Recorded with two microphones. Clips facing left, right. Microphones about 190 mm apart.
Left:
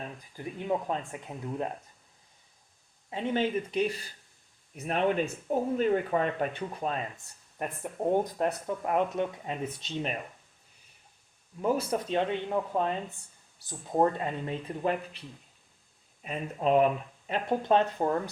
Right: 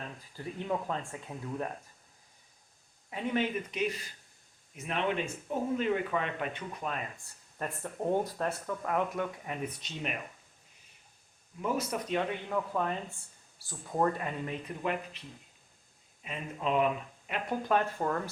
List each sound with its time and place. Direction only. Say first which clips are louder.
0.3 s speech: left 3 dB; 20° left (ahead or behind)
3.1 s speech: left 3 dB; 30° left (ahead or behind)
7.6 s speech: left 3 dB; 15° left (ahead or behind)
11.6 s speech: left 4 dB; 30° left (ahead or behind)
16.2 s speech: left 5 dB; 40° left (ahead or behind)
17.2 s speech: left 5 dB; 30° left (ahead or behind)